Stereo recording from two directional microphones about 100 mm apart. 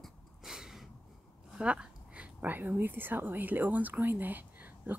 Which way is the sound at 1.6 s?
10° right (ahead or behind).